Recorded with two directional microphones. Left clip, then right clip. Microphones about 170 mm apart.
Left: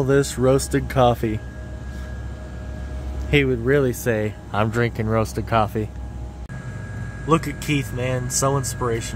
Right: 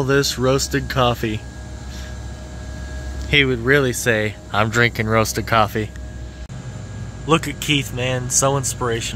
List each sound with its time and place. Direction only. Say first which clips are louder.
0.0 s speech: right 1 dB; 15° left (ahead or behind)
3.3 s speech: right 3 dB; 5° left (ahead or behind)
7.2 s speech: right 3 dB; centre (ahead or behind)